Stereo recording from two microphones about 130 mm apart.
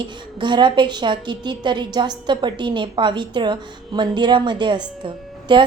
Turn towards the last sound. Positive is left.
turn(degrees=-40)  # may be behind; listen again after turning